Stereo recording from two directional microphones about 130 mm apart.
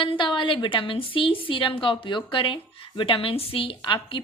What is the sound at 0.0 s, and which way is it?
A woman's voice, 40° left (ahead or behind).